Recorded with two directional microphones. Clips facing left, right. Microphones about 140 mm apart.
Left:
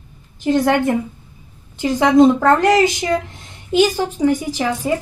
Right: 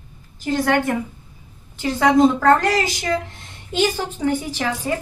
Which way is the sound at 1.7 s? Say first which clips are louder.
Left 3 dB; 15° left (ahead or behind).